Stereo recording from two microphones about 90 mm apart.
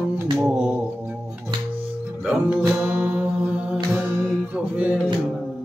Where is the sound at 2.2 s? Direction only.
10° right (ahead or behind).